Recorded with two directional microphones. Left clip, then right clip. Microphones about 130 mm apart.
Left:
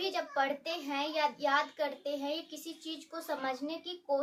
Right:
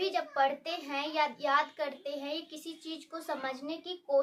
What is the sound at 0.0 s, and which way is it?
A child's voice, 25° right (ahead or behind).